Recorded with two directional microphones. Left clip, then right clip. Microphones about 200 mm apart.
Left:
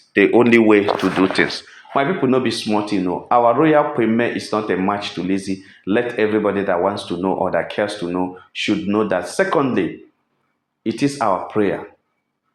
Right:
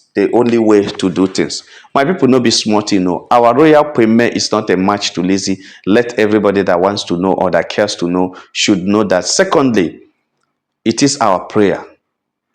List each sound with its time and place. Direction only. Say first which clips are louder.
0.1 s speech: right 1 dB; 20° right (ahead or behind)
1.0 s speech: right 2 dB; 55° right (ahead or behind)
10.8 s speech: right 7 dB; 45° right (ahead or behind)